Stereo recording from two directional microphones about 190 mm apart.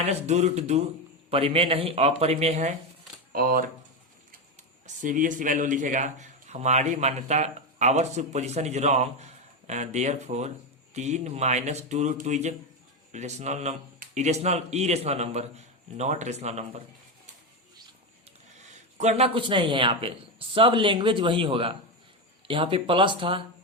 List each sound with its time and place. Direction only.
0.0 s speech: 35° right (ahead or behind)
3.3 s speech: 50° right (ahead or behind)
5.0 s speech: 45° right (ahead or behind)
18.9 s speech: 35° right (ahead or behind)